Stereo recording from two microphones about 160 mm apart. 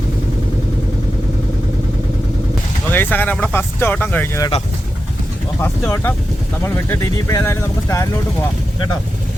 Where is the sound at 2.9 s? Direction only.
10° left (ahead or behind).